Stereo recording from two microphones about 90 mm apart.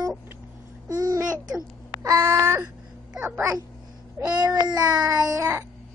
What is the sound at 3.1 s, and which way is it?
Speech, 15° right (ahead or behind).